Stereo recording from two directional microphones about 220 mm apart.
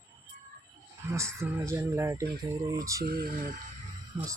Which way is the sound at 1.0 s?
15° right (ahead or behind).